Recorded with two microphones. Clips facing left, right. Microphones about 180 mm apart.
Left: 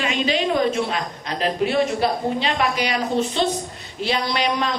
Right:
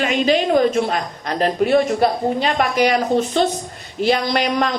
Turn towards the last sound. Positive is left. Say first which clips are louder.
# right 3 dB
turn(degrees=-50)  # may be behind; listen again after turning